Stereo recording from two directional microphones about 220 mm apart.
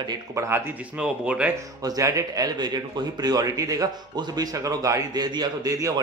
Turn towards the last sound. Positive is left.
turn(degrees=-15)  # may be behind; listen again after turning